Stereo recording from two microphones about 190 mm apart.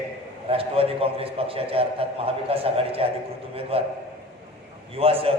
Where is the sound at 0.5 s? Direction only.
30° right (ahead or behind).